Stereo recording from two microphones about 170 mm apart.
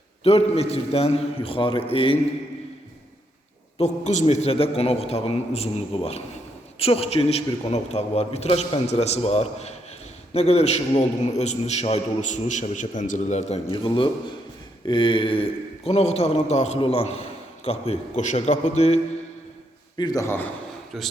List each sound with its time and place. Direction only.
0.3 s a man's voice: 35° left (ahead or behind)
3.8 s a man's voice: 40° left (ahead or behind)
20.0 s a man's voice: 20° left (ahead or behind)
20.9 s speech: centre (ahead or behind)